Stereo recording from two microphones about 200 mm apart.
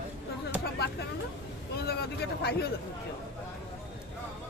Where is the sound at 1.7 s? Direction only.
55° left (ahead or behind).